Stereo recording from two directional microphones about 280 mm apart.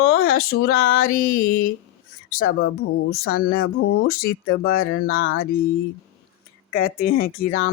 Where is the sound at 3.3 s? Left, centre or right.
Left.